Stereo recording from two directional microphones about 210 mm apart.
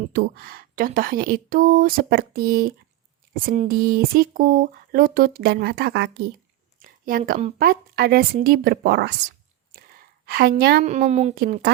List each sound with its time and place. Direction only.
0.1 s speech: 50° right (ahead or behind)
6.7 s a woman's voice: 40° right (ahead or behind)
10.2 s a woman's voice: 45° right (ahead or behind)
10.8 s a woman's voice: 35° right (ahead or behind)
11.3 s speech: 45° right (ahead or behind)